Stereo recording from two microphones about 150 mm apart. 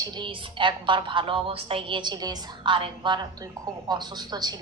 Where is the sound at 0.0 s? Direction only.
30° right (ahead or behind).